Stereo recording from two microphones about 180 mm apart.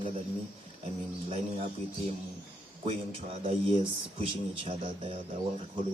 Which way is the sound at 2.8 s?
35° right (ahead or behind).